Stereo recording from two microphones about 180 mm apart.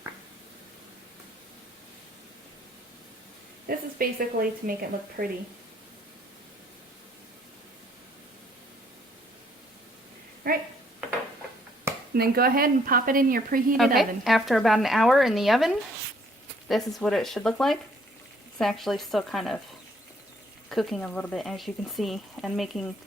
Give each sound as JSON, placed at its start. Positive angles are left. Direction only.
{"t": 3.7, "sound": "speech", "side_deg": -55}
{"t": 10.5, "sound": "speech", "side_deg": -55}
{"t": 12.1, "sound": "speech", "side_deg": -60}
{"t": 13.7, "sound": "speech", "side_deg": 0}
{"t": 20.7, "sound": "speech", "side_deg": 0}